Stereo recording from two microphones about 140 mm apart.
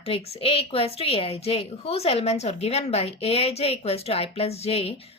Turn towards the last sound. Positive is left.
turn(degrees=45)  # may be behind; listen again after turning